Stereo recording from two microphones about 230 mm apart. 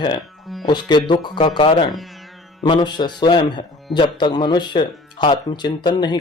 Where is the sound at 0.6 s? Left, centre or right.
Centre.